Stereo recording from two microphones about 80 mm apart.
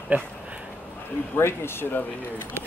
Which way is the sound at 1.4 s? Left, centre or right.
Left.